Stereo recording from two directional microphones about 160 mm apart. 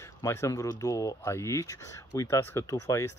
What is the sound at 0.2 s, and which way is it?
Speech, 15° left (ahead or behind).